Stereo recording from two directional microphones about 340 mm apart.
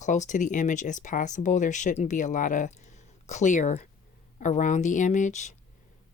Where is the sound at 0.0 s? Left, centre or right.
Left.